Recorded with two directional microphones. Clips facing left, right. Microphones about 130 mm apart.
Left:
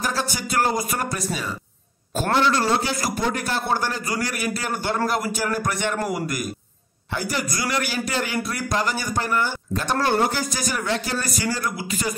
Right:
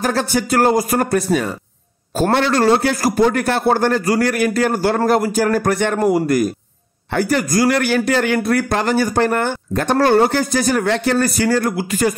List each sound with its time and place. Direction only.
0.0 s a man's voice: 45° right (ahead or behind)
2.5 s a man's voice: 50° right (ahead or behind)
5.9 s a man's voice: 30° right (ahead or behind)
7.1 s a man's voice: 55° right (ahead or behind)